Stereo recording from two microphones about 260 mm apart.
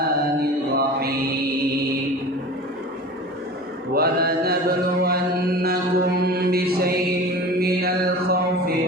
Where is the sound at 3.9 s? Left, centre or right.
Right.